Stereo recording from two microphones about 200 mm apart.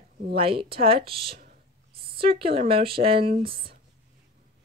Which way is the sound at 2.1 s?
25° right (ahead or behind).